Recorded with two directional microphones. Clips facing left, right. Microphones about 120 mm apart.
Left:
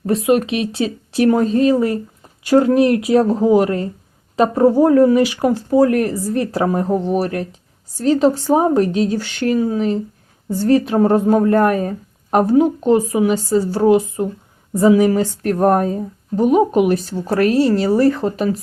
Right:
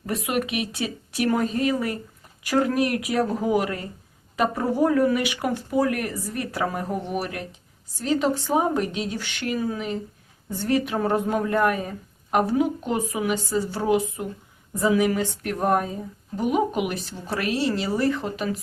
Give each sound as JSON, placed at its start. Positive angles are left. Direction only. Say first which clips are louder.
{"t": 0.0, "sound": "a woman's voice", "louder": "left 10 dB", "side_deg": 30}